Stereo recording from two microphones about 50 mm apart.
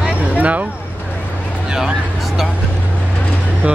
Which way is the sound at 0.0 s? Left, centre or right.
Right.